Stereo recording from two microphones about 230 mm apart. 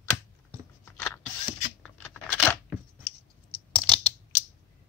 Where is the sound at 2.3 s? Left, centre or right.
Centre.